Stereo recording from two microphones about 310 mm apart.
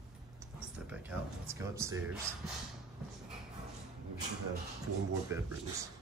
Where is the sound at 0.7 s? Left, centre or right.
Centre.